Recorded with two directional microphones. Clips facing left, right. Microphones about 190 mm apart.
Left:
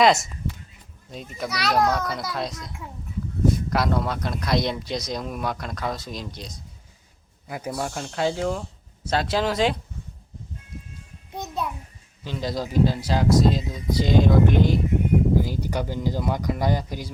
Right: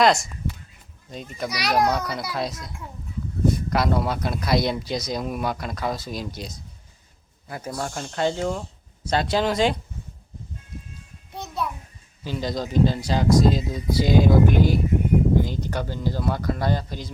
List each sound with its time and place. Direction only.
0.0 s speech: centre (ahead or behind)
1.5 s a child's voice: 15° right (ahead or behind)
1.9 s speech: centre (ahead or behind)
7.4 s speech: 10° left (ahead or behind)
11.3 s a sound: 15° left (ahead or behind)
12.2 s speech: centre (ahead or behind)
15.4 s speech: 5° left (ahead or behind)